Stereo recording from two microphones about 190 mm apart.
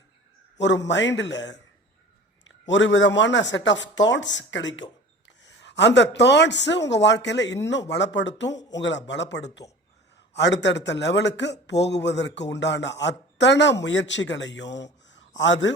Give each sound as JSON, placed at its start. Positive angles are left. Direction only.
{"t": 0.9, "sound": "speech", "side_deg": 70}
{"t": 2.6, "sound": "speech", "side_deg": 75}